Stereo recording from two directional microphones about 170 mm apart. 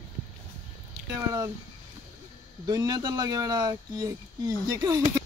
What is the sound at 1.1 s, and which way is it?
Speech, 15° right (ahead or behind).